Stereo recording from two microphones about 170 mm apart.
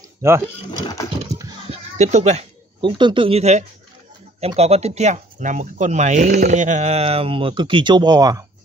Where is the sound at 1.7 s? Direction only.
40° right (ahead or behind).